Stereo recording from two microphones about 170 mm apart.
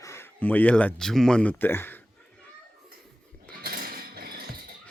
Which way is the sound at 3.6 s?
60° right (ahead or behind).